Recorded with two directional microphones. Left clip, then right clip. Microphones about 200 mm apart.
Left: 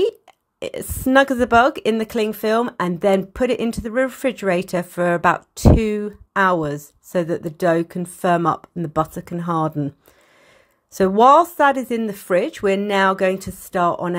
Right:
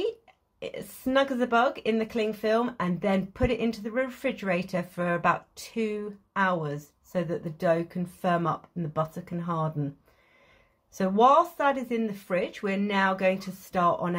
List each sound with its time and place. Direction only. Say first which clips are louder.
0.6 s speech: left 9 dB; 50° left (ahead or behind)
11.0 s speech: left 8 dB; 45° left (ahead or behind)